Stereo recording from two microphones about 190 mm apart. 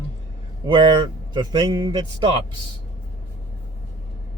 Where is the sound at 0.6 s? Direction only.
25° right (ahead or behind).